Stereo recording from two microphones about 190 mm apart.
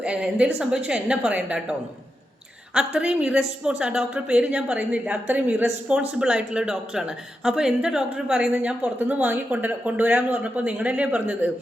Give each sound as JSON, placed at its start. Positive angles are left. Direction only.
{"t": 0.0, "sound": "a woman's voice", "side_deg": -5}
{"t": 2.7, "sound": "a woman's voice", "side_deg": -5}